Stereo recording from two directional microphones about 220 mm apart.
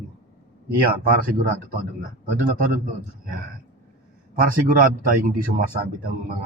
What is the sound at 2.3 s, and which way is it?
Speech, 40° right (ahead or behind).